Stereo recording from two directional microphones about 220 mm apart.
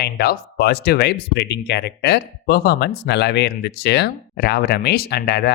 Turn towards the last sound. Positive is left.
turn(degrees=45)  # may be behind; listen again after turning